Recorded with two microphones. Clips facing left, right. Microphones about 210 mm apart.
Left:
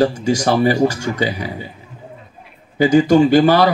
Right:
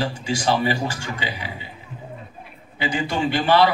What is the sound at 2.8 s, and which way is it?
Speech, 45° left (ahead or behind).